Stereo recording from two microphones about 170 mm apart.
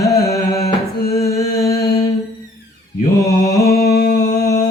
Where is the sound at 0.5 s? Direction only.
65° left (ahead or behind).